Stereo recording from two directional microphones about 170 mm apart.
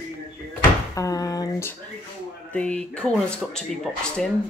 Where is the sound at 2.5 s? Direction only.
5° left (ahead or behind).